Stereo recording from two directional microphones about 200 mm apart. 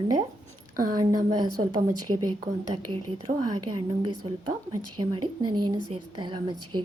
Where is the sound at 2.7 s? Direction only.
30° right (ahead or behind).